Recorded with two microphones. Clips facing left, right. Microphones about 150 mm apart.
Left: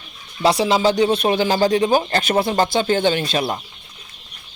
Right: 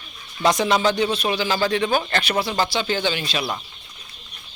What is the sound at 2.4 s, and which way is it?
Speech, 50° left (ahead or behind).